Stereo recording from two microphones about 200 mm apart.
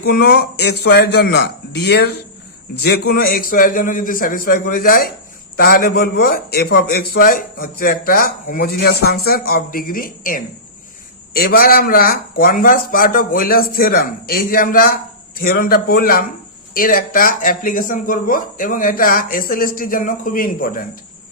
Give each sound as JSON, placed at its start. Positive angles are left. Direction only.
{"t": 0.0, "sound": "a man's voice", "side_deg": 50}